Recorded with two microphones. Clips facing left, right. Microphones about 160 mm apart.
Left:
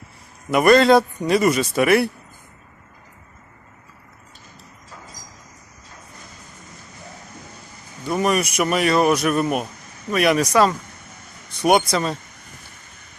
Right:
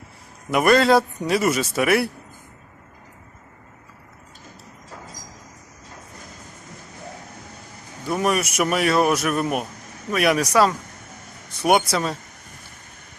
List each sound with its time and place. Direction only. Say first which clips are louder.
0.5 s speech: left 3 dB; 5° right (ahead or behind)
8.0 s speech: left 2 dB; 5° right (ahead or behind)